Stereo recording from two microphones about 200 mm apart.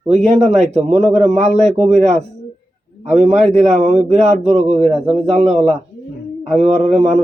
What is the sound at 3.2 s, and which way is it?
Speech, 30° right (ahead or behind).